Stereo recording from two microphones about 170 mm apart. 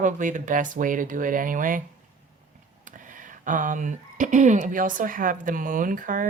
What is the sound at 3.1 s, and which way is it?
Speech, 50° right (ahead or behind).